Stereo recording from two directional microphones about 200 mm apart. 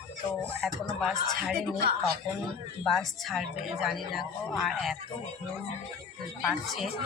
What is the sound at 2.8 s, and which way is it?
Speech, centre (ahead or behind).